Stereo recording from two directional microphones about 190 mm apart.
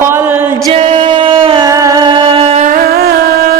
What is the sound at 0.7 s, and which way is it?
Music, 30° right (ahead or behind).